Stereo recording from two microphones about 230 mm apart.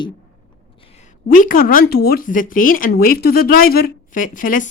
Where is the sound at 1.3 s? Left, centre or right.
Left.